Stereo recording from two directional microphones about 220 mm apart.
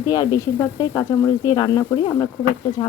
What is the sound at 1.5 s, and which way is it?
Speech, 15° left (ahead or behind).